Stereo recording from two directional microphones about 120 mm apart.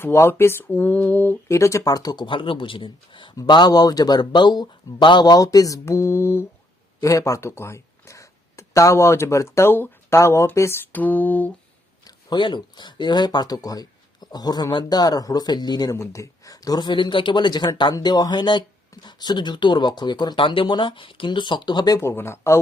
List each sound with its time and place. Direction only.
0.0 s speech: 20° left (ahead or behind)
1.5 s speech: 25° left (ahead or behind)
2.2 s speech: 45° left (ahead or behind); by 11.5 s 15° left (ahead or behind)
12.0 s speech: 40° left (ahead or behind); by 22.6 s 20° left (ahead or behind)